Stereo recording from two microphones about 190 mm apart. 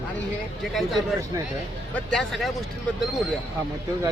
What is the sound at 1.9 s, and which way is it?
Speech, centre (ahead or behind).